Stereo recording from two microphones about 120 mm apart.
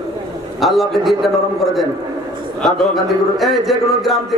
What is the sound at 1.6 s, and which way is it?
Speech, 25° left (ahead or behind).